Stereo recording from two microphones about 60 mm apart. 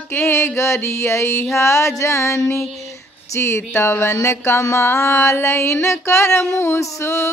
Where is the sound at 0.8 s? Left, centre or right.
Left.